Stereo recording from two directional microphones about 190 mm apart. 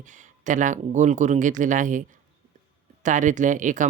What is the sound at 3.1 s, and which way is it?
Speech, 40° right (ahead or behind).